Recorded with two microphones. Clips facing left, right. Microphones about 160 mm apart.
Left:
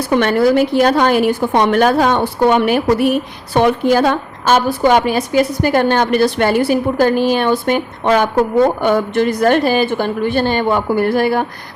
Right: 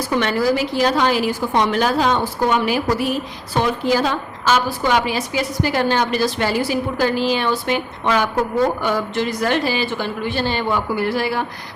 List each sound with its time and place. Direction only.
0.1 s a woman's voice: 55° left (ahead or behind)
8.8 s a woman's voice: 55° left (ahead or behind)